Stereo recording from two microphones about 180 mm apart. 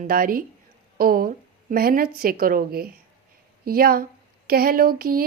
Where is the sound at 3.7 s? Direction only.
55° right (ahead or behind).